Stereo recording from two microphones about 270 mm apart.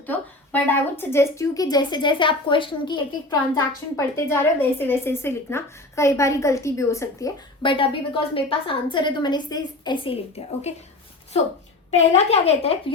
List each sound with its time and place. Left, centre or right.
0.0 s a woman's voice: centre; by 10.8 s left
11.9 s speech: left